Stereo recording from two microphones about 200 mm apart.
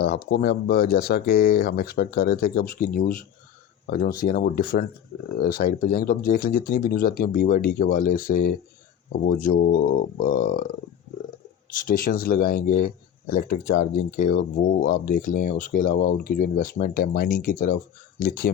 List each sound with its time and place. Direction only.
0.0 s speech: 50° left (ahead or behind)
11.7 s speech: 45° left (ahead or behind)